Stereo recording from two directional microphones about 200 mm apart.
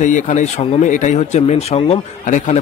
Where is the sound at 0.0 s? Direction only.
40° left (ahead or behind).